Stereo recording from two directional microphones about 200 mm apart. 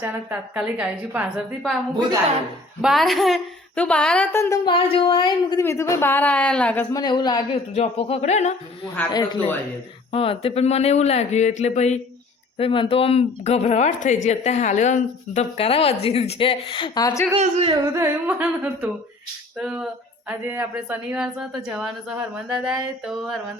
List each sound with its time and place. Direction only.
0.0 s a woman's voice: 10° right (ahead or behind)
2.8 s a woman's voice: centre (ahead or behind)
6.9 s a woman's voice: 20° left (ahead or behind)
7.7 s speech: 30° left (ahead or behind)
9.1 s a woman's voice: 20° left (ahead or behind)
17.4 s speech: 30° right (ahead or behind)
17.9 s a woman's voice: 10° right (ahead or behind)